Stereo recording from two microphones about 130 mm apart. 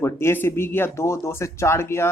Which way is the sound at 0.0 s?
20° left (ahead or behind).